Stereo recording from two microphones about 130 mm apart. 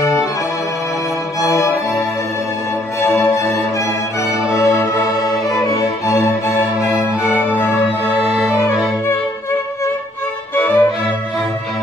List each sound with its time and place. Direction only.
0.0 s music: 25° left (ahead or behind)
1.4 s music: 25° left (ahead or behind)
4.3 s music: 20° left (ahead or behind)
7.5 s music: 20° left (ahead or behind)
10.5 s music: 15° left (ahead or behind)